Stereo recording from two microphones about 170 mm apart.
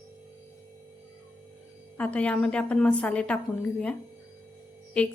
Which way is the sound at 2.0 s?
5° left (ahead or behind).